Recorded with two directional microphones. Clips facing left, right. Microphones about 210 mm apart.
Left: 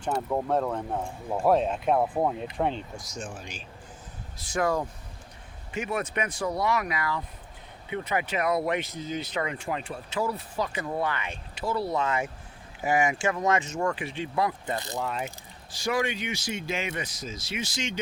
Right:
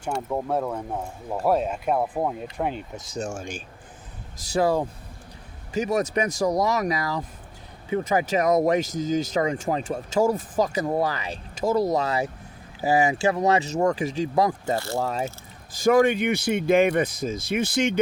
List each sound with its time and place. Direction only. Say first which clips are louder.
0.1 s speech: even; 5° right (ahead or behind)
3.3 s speech: right 7 dB; 50° right (ahead or behind)
4.5 s speech: right 5 dB; 30° right (ahead or behind); by 18.0 s 55° right (ahead or behind)